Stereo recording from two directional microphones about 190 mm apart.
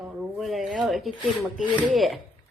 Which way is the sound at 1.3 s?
Centre (ahead or behind).